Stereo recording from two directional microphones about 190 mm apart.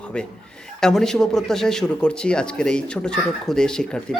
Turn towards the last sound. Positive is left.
turn(degrees=5)  # may be behind; listen again after turning